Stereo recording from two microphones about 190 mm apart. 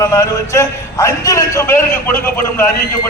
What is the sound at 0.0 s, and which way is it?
A man's voice, 15° left (ahead or behind).